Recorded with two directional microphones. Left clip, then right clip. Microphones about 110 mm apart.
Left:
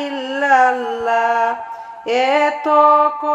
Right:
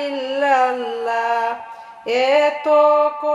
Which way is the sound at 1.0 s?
50° left (ahead or behind).